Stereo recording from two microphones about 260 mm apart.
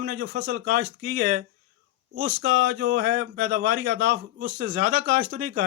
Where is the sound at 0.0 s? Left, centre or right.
Right.